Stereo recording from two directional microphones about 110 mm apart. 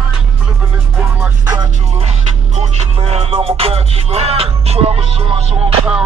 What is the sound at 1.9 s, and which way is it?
Music, 85° right.